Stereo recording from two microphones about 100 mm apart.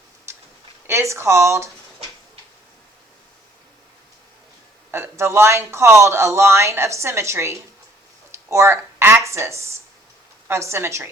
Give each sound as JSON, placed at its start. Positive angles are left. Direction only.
{"t": 0.3, "sound": "a sound", "side_deg": -25}
{"t": 0.9, "sound": "speech", "side_deg": -30}
{"t": 4.9, "sound": "speech", "side_deg": -25}